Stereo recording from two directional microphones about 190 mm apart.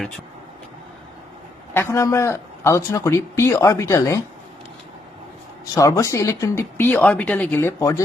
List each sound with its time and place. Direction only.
1.7 s a man's voice: 15° left (ahead or behind)
5.7 s a man's voice: 15° left (ahead or behind)